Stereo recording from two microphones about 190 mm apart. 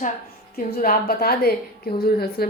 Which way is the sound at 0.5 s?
50° left (ahead or behind).